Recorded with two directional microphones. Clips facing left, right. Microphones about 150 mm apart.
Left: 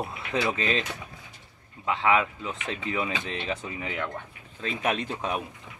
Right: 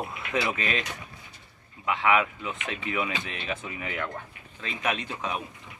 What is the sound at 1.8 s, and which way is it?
Speech, 30° left (ahead or behind).